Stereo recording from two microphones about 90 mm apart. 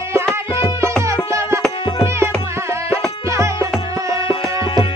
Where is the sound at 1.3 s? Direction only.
30° right (ahead or behind).